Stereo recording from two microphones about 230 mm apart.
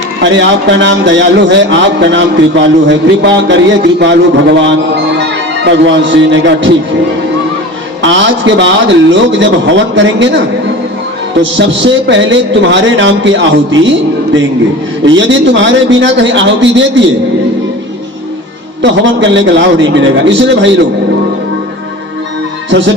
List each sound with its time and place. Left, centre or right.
0.2 s a man's voice: right
8.0 s a man's voice: right
11.5 s a man's voice: right
15.0 s a man's voice: right
18.8 s a man's voice: right